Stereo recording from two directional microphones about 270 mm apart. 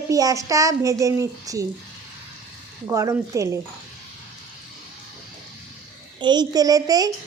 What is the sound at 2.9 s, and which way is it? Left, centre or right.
Speech, centre.